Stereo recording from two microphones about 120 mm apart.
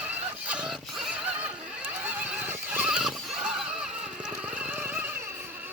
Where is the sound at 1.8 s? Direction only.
15° right (ahead or behind).